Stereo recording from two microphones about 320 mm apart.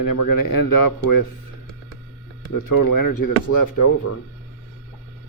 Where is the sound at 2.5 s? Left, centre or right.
Left.